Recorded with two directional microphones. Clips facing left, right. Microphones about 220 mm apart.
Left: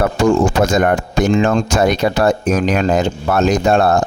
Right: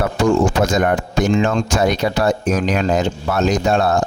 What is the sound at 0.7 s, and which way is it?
Speech, 55° left (ahead or behind).